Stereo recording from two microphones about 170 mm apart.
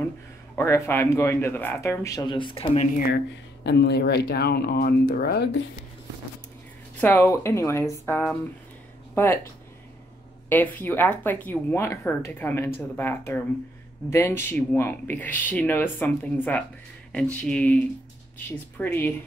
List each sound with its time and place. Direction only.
0.6 s speech: 15° left (ahead or behind); by 2.9 s 35° left (ahead or behind)
3.6 s speech: 80° left
7.0 s speech: 15° left (ahead or behind)
10.5 s speech: 10° left (ahead or behind)
18.8 s speech: 10° left (ahead or behind)